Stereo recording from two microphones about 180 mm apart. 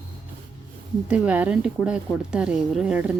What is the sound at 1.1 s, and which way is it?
Speech, 10° right (ahead or behind).